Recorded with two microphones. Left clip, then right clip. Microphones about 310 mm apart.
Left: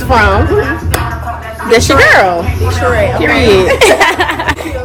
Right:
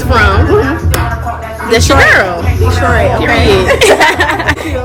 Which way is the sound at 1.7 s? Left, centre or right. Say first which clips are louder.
Left 1 dB; centre.